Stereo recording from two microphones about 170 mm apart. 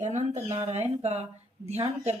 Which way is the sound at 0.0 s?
45° right (ahead or behind).